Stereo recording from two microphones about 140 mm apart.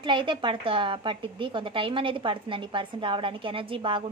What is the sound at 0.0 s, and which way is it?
A woman's voice, 35° right (ahead or behind).